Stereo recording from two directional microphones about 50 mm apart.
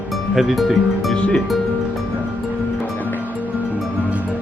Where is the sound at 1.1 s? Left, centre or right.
Centre.